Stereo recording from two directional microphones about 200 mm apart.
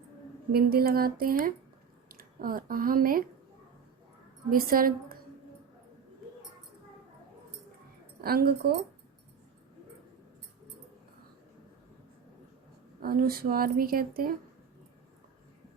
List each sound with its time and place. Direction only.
0.5 s a woman's voice: 50° right (ahead or behind)
4.4 s a woman's voice: 45° right (ahead or behind)
8.2 s a woman's voice: 50° right (ahead or behind)
13.0 s a woman's voice: 50° right (ahead or behind)